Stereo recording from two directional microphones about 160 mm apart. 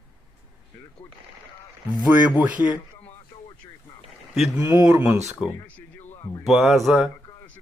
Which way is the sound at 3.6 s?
30° left (ahead or behind).